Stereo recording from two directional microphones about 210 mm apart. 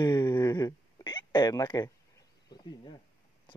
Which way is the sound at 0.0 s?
20° left (ahead or behind).